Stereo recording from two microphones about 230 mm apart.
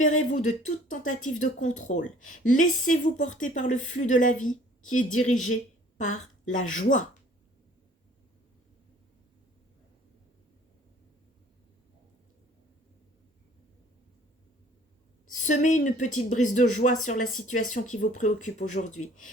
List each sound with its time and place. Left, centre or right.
0.0 s speech: left
15.4 s speech: left